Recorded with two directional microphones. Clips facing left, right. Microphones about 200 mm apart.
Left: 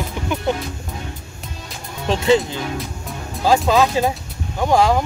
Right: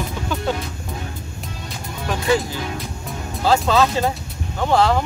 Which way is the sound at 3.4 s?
15° left (ahead or behind).